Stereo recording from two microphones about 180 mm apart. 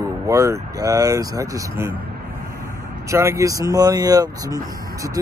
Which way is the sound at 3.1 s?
15° right (ahead or behind).